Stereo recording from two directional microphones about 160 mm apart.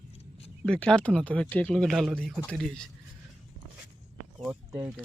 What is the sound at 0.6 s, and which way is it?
Speech, 5° left (ahead or behind).